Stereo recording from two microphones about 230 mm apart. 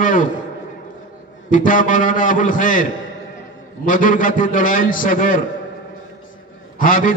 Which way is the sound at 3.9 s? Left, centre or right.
Left.